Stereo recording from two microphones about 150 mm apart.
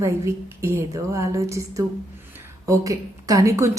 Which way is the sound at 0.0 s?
20° right (ahead or behind).